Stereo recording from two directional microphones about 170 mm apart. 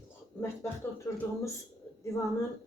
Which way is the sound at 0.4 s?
15° left (ahead or behind).